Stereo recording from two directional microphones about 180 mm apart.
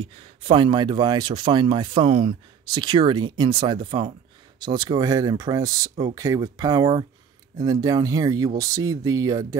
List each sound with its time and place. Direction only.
0.4 s speech: 30° right (ahead or behind)